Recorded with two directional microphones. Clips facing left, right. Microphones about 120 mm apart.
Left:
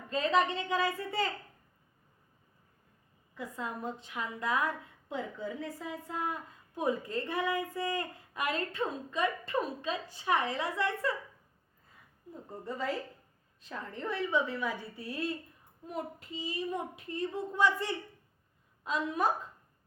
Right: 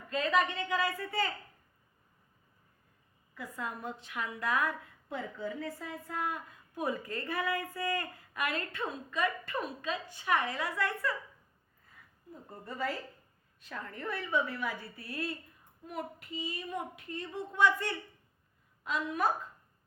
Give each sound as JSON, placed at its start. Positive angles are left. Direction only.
{"t": 0.1, "sound": "a woman's voice", "side_deg": 30}
{"t": 3.3, "sound": "a woman's voice", "side_deg": 25}
{"t": 12.5, "sound": "a woman's voice", "side_deg": 20}
{"t": 18.8, "sound": "a woman's voice", "side_deg": 25}